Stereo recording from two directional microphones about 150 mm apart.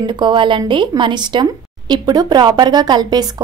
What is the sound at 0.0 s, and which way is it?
Speech, 30° right (ahead or behind).